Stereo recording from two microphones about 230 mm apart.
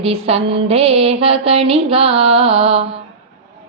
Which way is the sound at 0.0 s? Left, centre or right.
Right.